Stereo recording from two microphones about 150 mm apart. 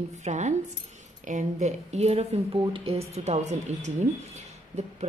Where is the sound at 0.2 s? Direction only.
50° right (ahead or behind).